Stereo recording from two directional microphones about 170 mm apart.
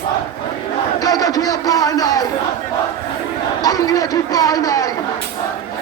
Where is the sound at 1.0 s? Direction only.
20° left (ahead or behind).